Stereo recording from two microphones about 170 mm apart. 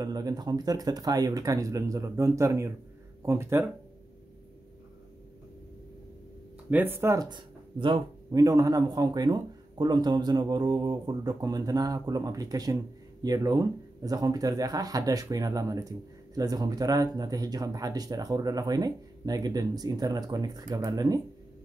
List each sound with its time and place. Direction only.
0.0 s speech: 20° right (ahead or behind)
6.7 s speech: 10° right (ahead or behind)